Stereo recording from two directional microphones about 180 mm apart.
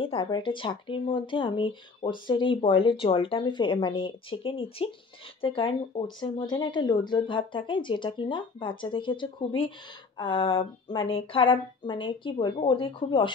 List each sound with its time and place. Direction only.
0.0 s speech: 30° left (ahead or behind)